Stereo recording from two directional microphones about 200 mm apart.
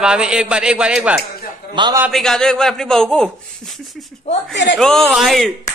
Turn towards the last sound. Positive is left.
turn(degrees=0)  # may be behind; listen again after turning